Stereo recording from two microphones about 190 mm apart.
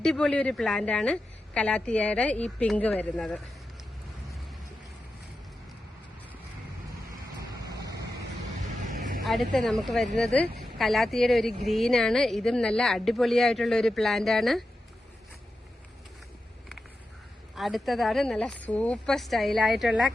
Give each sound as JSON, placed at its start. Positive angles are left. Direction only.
{"t": 0.0, "sound": "speech", "side_deg": 5}
{"t": 7.6, "sound": "vehicle", "side_deg": -20}
{"t": 8.9, "sound": "vehicle", "side_deg": -45}
{"t": 9.2, "sound": "speech", "side_deg": 0}
{"t": 17.5, "sound": "speech", "side_deg": 0}